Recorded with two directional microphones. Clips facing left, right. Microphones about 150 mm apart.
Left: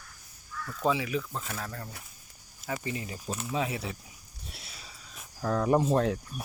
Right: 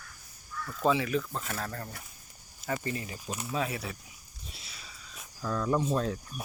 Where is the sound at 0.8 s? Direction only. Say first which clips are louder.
Right 1 dB; 10° left (ahead or behind).